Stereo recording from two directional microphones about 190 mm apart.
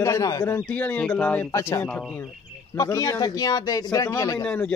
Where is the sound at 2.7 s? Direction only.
15° left (ahead or behind).